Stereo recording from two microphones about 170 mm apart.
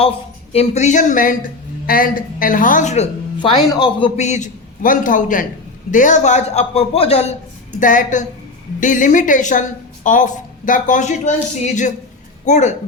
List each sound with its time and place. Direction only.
0.5 s a woman's voice: 40° left (ahead or behind)
3.4 s speech: 30° left (ahead or behind)
4.2 s a woman's voice: 45° left (ahead or behind)
7.8 s a woman's voice: 50° left (ahead or behind)